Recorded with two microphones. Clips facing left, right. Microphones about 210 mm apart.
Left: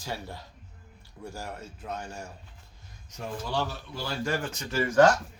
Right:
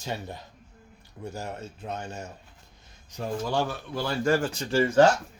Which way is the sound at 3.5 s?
55° right (ahead or behind).